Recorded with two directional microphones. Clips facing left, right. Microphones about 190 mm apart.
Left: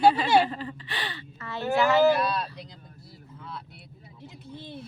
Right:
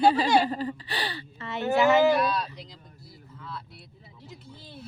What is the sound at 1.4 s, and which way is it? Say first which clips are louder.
Speech: right 2 dB; 20° right (ahead or behind).